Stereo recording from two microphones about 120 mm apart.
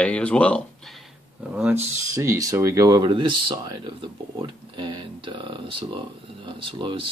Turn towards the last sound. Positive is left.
turn(degrees=-45)  # may be behind; listen again after turning